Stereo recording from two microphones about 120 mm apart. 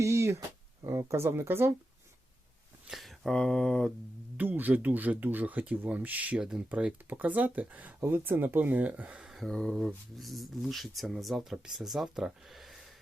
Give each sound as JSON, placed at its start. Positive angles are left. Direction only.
{"t": 0.0, "sound": "a sound", "side_deg": -25}
{"t": 0.9, "sound": "speech", "side_deg": -25}
{"t": 2.8, "sound": "speech", "side_deg": 0}
{"t": 4.4, "sound": "speech", "side_deg": -15}